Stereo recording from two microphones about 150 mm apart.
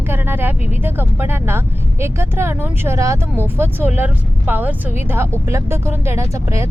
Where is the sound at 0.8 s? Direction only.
15° right (ahead or behind).